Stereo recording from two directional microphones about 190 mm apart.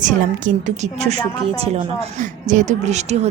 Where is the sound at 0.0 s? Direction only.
45° right (ahead or behind).